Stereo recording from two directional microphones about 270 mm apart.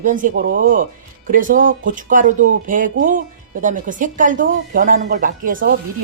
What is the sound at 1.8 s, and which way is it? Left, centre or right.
Speech, right.